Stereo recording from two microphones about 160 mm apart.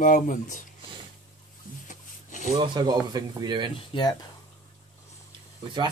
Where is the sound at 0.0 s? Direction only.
55° left (ahead or behind).